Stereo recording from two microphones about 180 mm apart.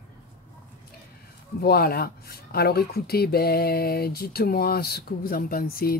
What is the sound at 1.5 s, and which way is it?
Speech, 60° left (ahead or behind).